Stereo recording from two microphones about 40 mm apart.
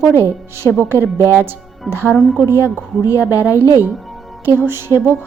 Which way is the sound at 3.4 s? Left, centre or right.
Right.